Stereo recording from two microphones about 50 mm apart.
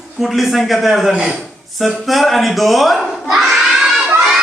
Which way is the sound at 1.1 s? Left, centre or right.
Centre.